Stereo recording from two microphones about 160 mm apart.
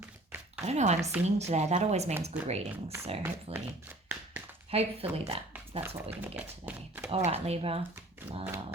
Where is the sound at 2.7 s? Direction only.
15° right (ahead or behind).